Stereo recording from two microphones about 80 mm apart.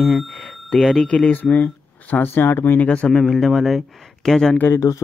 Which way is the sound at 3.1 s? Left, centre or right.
Centre.